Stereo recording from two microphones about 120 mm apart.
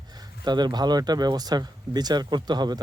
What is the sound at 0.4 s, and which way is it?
Speech, 35° right (ahead or behind).